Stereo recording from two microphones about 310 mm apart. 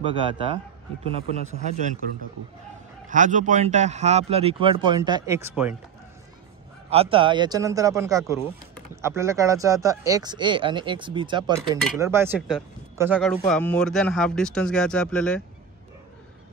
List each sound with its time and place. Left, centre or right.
0.0 s speech: centre
3.1 s speech: right; by 5.8 s centre
6.9 s speech: centre